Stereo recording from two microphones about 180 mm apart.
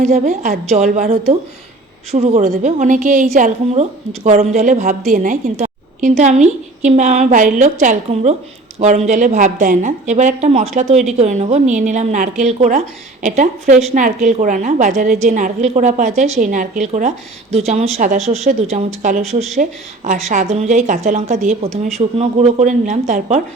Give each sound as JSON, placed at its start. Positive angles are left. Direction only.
{"t": 0.0, "sound": "a woman's voice", "side_deg": -40}